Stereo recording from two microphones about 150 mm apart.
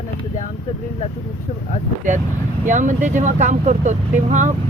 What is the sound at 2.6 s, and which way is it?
Speech, 55° right (ahead or behind).